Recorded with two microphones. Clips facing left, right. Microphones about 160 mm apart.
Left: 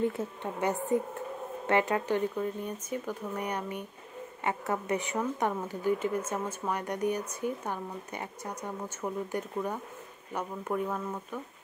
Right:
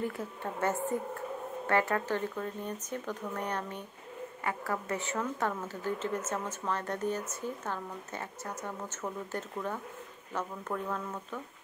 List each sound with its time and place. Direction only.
0.0 s speech: 20° left (ahead or behind)